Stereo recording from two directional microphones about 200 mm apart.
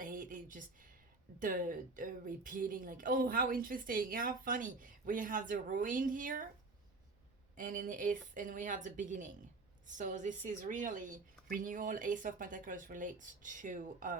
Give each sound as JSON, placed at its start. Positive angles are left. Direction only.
{"t": 0.0, "sound": "a sound", "side_deg": -45}
{"t": 1.4, "sound": "speech", "side_deg": -40}
{"t": 7.5, "sound": "a woman's voice", "side_deg": -40}